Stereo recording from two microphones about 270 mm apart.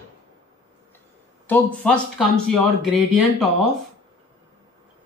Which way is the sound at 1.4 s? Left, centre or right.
Centre.